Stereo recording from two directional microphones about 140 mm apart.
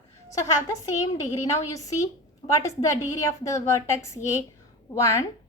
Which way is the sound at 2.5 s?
20° left (ahead or behind).